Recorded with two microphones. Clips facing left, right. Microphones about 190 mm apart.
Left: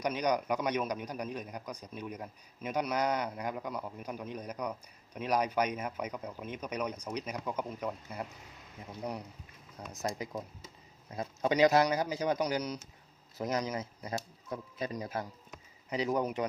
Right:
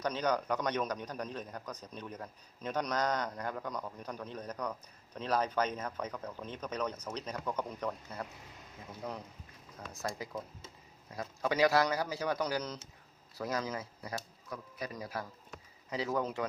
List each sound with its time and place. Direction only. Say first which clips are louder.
0.0 s a man's voice: left 2 dB; 15° left (ahead or behind)
9.9 s a man's voice: left 3 dB; 20° left (ahead or behind)